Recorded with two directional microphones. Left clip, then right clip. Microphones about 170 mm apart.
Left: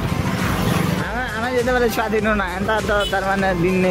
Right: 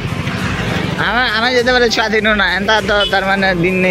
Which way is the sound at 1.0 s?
20° right (ahead or behind).